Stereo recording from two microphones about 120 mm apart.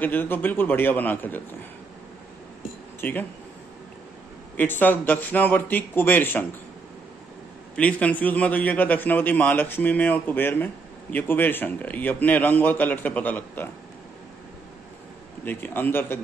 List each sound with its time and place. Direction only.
0.0 s a man's voice: 15° left (ahead or behind)
3.0 s speech: 15° left (ahead or behind)
4.6 s a man's voice: 15° left (ahead or behind)
7.7 s a man's voice: 10° left (ahead or behind)
15.4 s a man's voice: 15° left (ahead or behind)